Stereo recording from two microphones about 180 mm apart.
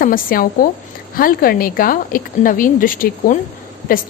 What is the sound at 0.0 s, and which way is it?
A woman's voice, 50° left (ahead or behind).